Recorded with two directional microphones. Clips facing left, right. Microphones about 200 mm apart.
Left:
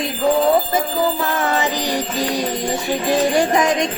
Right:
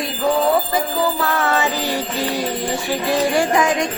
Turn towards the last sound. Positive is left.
turn(degrees=20)  # may be behind; listen again after turning